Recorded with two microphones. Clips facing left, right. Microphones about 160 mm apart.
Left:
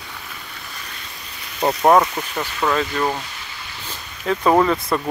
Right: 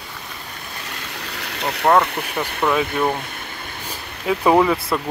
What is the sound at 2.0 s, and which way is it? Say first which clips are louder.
Speech: right 1 dB; 60° right (ahead or behind).